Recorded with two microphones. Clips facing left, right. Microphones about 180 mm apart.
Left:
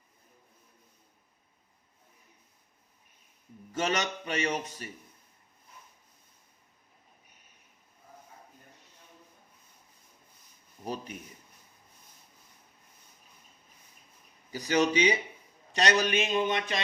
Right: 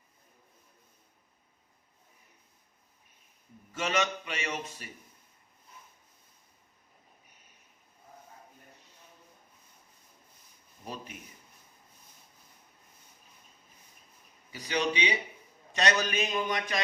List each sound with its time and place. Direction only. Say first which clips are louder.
3.7 s a man's voice: even; 40° left (ahead or behind)
14.5 s speech: left 5 dB; 45° left (ahead or behind)
15.7 s speech: left 3 dB; 35° left (ahead or behind)